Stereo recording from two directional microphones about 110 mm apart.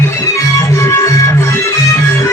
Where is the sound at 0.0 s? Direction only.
25° left (ahead or behind).